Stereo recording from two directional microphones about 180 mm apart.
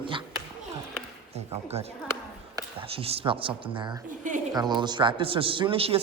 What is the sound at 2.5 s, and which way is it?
A man's voice, 30° right (ahead or behind).